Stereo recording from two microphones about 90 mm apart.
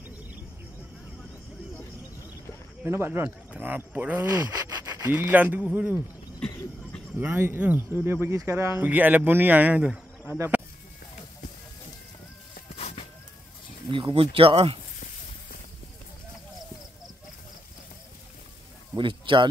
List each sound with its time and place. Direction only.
2.8 s speech: 25° right (ahead or behind)
4.8 s speech: 25° right (ahead or behind)
7.2 s speech: 20° right (ahead or behind)
8.8 s speech: 20° right (ahead or behind)
10.3 s speech: 25° right (ahead or behind)
13.8 s speech: 70° right (ahead or behind); by 14.8 s 90° right
18.9 s a sound: 65° right (ahead or behind)